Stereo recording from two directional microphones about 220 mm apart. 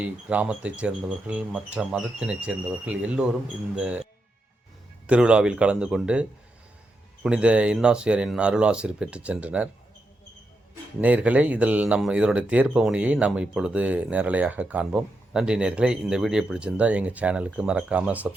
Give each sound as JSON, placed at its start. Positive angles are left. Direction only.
{"t": 0.0, "sound": "speech", "side_deg": -5}
{"t": 5.0, "sound": "speech", "side_deg": -5}
{"t": 11.0, "sound": "speech", "side_deg": -5}